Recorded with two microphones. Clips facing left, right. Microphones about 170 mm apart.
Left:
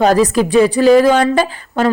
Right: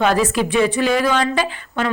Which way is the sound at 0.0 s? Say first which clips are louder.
Left 5 dB; 40° left (ahead or behind).